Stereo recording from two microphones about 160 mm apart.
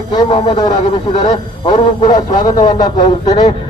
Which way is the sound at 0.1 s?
30° left (ahead or behind).